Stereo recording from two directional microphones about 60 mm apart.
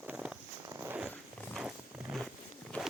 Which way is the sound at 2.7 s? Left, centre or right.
Left.